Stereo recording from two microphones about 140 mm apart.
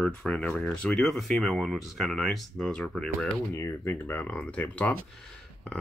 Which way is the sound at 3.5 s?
15° left (ahead or behind).